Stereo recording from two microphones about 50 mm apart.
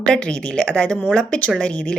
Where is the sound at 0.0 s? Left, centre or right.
Centre.